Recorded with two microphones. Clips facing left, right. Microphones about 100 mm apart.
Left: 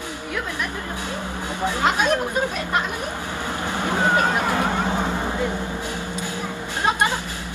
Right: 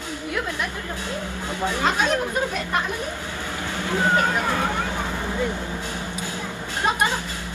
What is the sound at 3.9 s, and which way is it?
Speech, 15° left (ahead or behind).